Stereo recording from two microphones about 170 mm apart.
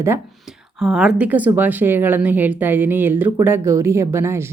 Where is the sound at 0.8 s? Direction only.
5° right (ahead or behind).